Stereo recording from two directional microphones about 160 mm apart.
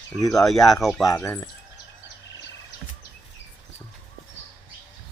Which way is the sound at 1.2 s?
20° left (ahead or behind).